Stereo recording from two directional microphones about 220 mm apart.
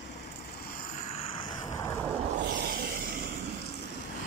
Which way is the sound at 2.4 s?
45° right (ahead or behind).